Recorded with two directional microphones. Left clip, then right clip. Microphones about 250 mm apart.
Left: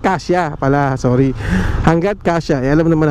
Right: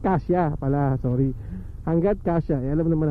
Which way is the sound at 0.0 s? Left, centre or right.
Centre.